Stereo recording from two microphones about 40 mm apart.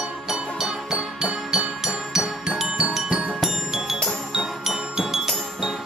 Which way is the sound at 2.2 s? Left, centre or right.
Right.